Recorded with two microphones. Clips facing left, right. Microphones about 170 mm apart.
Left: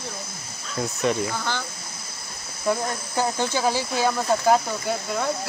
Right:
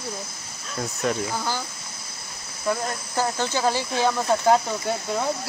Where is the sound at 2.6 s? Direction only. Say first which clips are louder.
Left 1 dB; 10° left (ahead or behind).